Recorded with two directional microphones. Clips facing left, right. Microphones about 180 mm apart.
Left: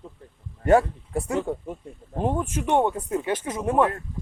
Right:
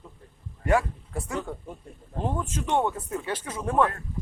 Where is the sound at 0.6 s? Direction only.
35° left (ahead or behind).